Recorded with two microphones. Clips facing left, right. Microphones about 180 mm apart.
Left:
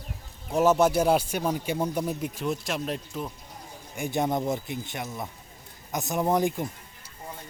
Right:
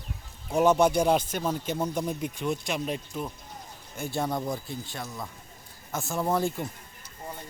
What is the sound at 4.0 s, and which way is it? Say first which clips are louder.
Speech: left 3 dB; 20° left (ahead or behind).